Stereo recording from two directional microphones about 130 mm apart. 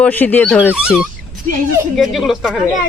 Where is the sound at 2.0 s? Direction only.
Centre (ahead or behind).